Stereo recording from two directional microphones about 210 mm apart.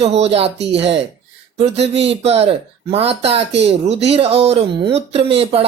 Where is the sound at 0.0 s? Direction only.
30° right (ahead or behind).